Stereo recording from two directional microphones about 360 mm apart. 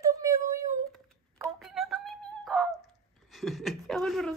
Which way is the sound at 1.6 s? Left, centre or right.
Centre.